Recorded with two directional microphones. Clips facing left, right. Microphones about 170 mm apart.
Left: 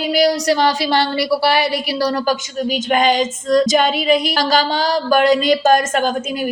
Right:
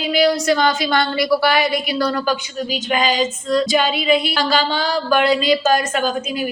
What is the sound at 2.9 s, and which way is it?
Female singing, 55° left (ahead or behind).